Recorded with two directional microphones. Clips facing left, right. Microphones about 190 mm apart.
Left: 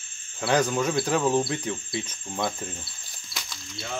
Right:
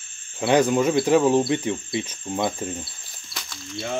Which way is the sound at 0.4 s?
25° right (ahead or behind).